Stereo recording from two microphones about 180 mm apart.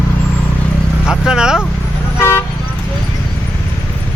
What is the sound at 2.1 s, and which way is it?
Toot, 15° left (ahead or behind).